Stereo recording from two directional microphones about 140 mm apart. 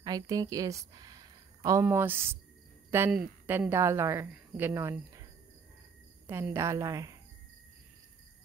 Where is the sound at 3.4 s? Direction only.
15° right (ahead or behind).